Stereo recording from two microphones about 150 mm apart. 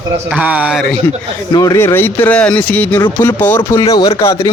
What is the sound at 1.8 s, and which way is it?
Speech, 15° left (ahead or behind).